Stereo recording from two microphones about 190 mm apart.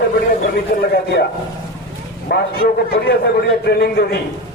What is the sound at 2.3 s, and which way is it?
A man's voice, 50° left (ahead or behind).